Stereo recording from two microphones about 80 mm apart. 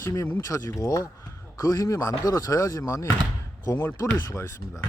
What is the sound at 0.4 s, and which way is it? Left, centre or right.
Speech, left.